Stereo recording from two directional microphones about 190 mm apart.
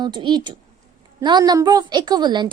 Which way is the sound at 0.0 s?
25° right (ahead or behind).